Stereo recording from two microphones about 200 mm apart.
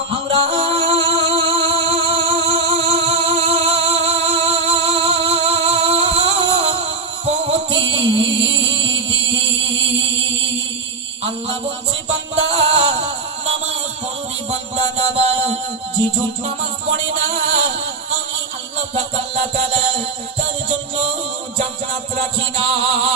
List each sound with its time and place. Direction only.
0.3 s music: 30° right (ahead or behind)
12.5 s music: 30° right (ahead or behind)
14.9 s music: 30° right (ahead or behind)